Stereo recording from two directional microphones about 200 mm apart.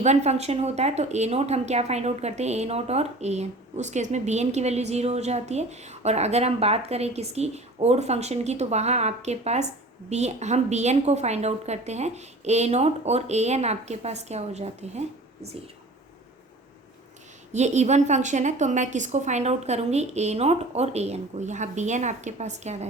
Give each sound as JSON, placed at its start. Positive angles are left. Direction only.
{"t": 0.0, "sound": "speech", "side_deg": -35}
{"t": 17.5, "sound": "speech", "side_deg": -35}